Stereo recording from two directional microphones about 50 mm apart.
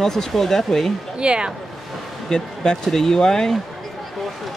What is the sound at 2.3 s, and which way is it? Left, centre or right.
Speech, centre.